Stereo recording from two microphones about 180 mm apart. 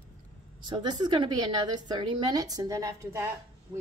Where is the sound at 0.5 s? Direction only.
25° right (ahead or behind).